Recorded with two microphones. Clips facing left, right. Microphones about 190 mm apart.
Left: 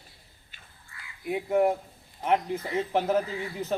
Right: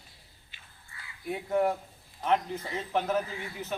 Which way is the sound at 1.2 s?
15° left (ahead or behind).